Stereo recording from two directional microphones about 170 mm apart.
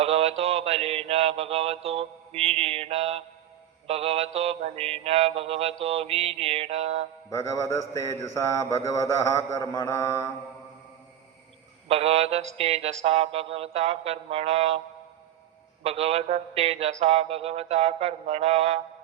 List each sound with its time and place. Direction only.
0.0 s mantra: 35° right (ahead or behind)
7.3 s mantra: 20° left (ahead or behind)
11.9 s mantra: 35° right (ahead or behind)
15.8 s mantra: 35° right (ahead or behind)